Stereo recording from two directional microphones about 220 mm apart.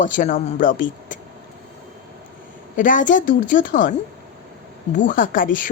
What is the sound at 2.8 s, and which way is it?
A woman's voice, 35° left (ahead or behind).